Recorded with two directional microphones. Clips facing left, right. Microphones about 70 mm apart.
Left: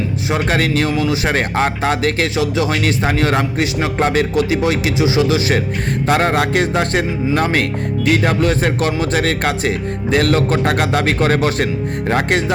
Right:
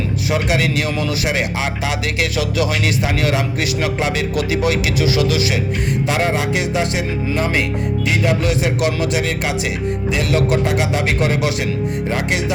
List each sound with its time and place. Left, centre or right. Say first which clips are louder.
0.3 s a man's voice: left 1 dB; left
0.9 s speech: left 3 dB; left
1.3 s a man's voice: left 4 dB; left
6.1 s speech: left 5 dB; left
9.2 s speech: left 3 dB; left
11.3 s a man's voice: left 3 dB; left